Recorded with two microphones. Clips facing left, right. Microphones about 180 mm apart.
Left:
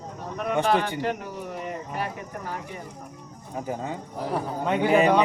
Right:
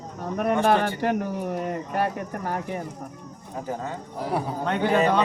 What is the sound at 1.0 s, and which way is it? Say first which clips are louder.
Speech: right 4 dB; 50° right (ahead or behind).